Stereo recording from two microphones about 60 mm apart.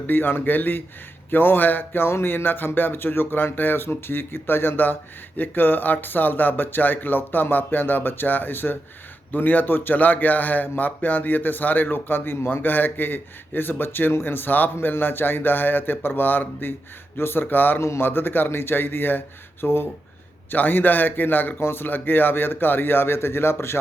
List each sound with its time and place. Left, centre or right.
0.1 s a man's voice: left